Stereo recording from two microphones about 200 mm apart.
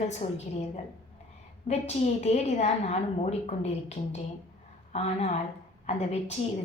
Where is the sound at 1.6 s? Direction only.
35° left (ahead or behind).